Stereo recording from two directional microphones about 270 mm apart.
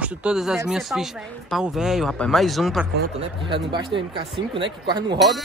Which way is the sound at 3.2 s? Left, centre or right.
Centre.